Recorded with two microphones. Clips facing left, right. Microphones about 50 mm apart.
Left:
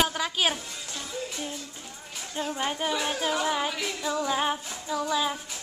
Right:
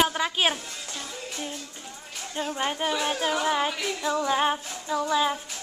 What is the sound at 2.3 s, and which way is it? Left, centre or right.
Female singing, centre.